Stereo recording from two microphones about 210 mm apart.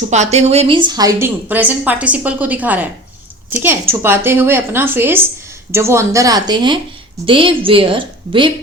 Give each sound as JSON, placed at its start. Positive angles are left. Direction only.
{"t": 0.1, "sound": "a woman's voice", "side_deg": -35}
{"t": 4.0, "sound": "a woman's voice", "side_deg": -10}